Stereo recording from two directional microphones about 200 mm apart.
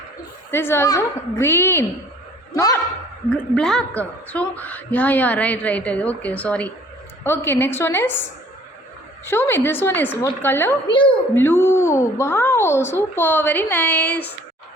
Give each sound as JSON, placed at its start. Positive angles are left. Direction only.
{"t": 0.5, "sound": "a woman's voice", "side_deg": 10}
{"t": 3.2, "sound": "a woman's voice", "side_deg": 5}
{"t": 9.2, "sound": "a woman's voice", "side_deg": 10}
{"t": 10.8, "sound": "a woman's voice", "side_deg": 25}
{"t": 11.3, "sound": "a woman's voice", "side_deg": 10}